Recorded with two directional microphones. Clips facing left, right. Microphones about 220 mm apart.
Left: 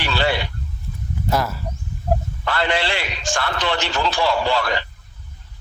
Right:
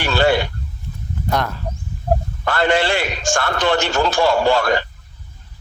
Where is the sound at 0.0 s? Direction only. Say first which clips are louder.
Right 5 dB; 45° right (ahead or behind).